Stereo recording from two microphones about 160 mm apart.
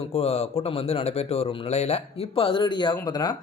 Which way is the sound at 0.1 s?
40° left (ahead or behind).